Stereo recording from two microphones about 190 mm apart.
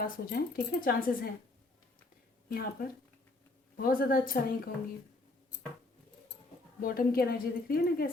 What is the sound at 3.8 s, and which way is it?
Speech, 50° left (ahead or behind).